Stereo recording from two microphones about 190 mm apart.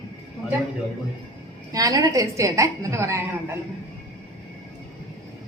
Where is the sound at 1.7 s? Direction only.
20° right (ahead or behind).